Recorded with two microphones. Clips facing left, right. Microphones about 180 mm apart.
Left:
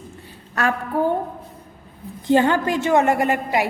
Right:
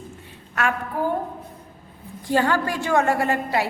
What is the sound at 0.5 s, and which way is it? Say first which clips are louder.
Speech: left 3 dB; 30° left (ahead or behind).